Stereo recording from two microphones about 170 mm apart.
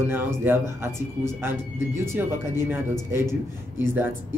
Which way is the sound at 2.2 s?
10° right (ahead or behind).